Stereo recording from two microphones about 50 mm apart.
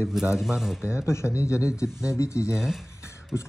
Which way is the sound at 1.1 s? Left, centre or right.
Left.